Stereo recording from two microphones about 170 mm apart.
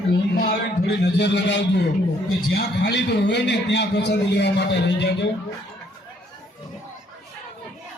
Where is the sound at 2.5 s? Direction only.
75° left (ahead or behind).